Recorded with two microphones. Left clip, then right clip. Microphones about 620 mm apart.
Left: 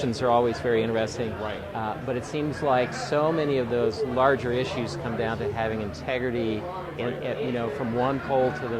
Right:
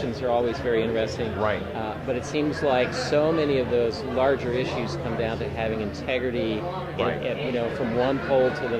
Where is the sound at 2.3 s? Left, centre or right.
Left.